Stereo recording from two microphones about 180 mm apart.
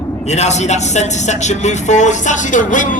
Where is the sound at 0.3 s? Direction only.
40° left (ahead or behind).